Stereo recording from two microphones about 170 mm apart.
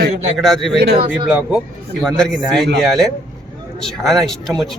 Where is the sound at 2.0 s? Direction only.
5° left (ahead or behind).